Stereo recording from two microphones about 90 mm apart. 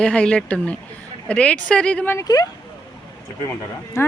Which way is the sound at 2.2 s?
45° left (ahead or behind).